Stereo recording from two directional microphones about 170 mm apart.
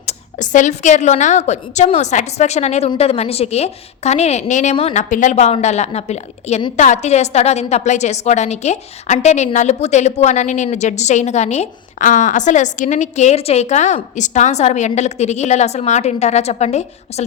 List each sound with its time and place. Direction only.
0.0 s a woman's voice: 45° left (ahead or behind)